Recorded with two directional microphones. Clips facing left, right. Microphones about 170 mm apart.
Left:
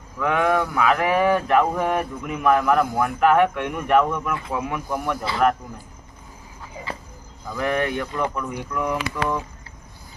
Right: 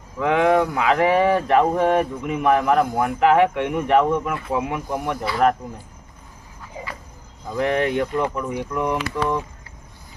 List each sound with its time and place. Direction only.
0.2 s speech: 25° right (ahead or behind)
7.5 s speech: 25° right (ahead or behind)